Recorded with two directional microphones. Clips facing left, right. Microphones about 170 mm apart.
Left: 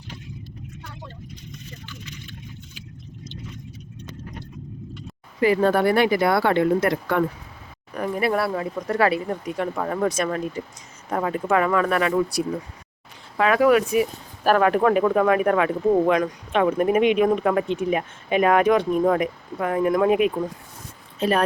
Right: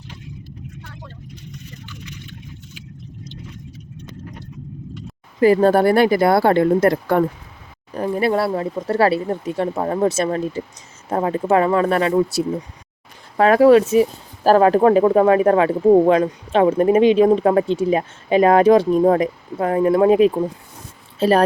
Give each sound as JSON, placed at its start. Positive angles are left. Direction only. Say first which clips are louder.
{"t": 5.4, "sound": "speech", "louder": "right 5 dB", "side_deg": -40}
{"t": 13.3, "sound": "speech", "louder": "right 6 dB", "side_deg": -40}